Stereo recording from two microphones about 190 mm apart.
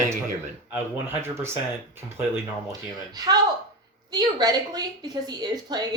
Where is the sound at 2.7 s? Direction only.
20° right (ahead or behind).